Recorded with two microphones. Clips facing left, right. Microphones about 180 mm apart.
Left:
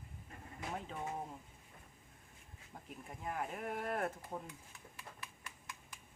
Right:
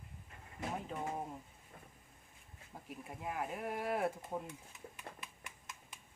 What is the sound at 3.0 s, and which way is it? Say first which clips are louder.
Speech: right 1 dB; 5° right (ahead or behind).